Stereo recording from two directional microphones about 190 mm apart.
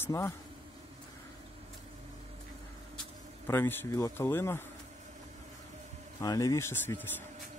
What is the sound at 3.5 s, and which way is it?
Speech, 10° left (ahead or behind).